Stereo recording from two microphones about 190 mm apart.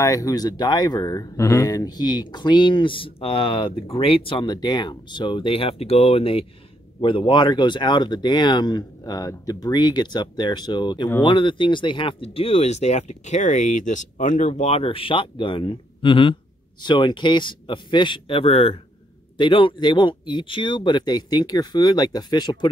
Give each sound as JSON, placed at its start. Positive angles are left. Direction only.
{"t": 0.0, "sound": "speech", "side_deg": 15}